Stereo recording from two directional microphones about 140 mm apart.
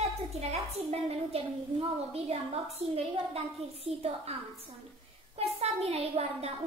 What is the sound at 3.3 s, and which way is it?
A woman's voice, 45° right (ahead or behind).